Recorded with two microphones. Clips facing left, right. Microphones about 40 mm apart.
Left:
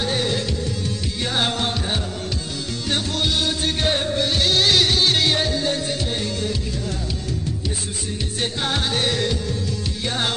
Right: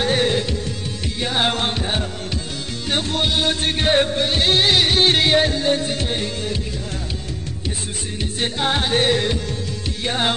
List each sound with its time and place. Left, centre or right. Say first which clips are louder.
0.0 s music: right 4 dB; right
1.2 s music: right 2 dB; centre
1.5 s music: right 2 dB; right
4.9 s music: right 3 dB; right
8.4 s music: right 3 dB; right